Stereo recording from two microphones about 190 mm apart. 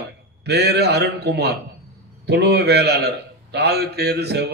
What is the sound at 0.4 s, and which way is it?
Mantra, 60° right (ahead or behind).